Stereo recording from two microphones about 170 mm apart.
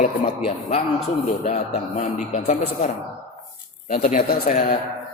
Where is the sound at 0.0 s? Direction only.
35° left (ahead or behind).